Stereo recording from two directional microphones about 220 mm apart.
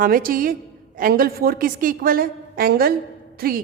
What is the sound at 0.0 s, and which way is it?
A woman's voice, 40° right (ahead or behind).